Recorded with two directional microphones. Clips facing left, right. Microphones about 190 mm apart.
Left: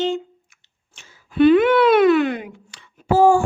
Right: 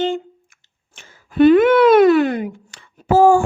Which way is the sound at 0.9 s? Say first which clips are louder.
Right 2 dB; 45° right (ahead or behind).